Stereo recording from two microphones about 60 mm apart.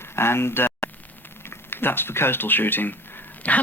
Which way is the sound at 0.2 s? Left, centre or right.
Left.